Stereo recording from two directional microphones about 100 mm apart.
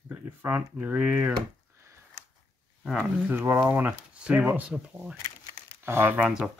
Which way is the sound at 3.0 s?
20° right (ahead or behind).